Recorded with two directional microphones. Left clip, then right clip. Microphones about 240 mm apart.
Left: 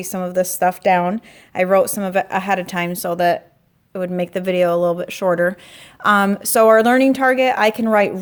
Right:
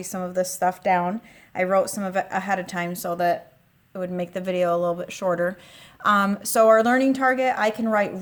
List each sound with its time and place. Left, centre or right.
0.0 s a woman's voice: left